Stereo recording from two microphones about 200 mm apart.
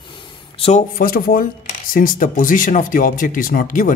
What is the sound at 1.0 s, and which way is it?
Speech, 45° left (ahead or behind).